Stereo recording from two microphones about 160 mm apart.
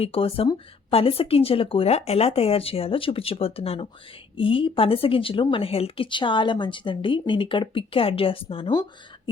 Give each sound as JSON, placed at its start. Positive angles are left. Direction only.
{"t": 0.0, "sound": "speech", "side_deg": 35}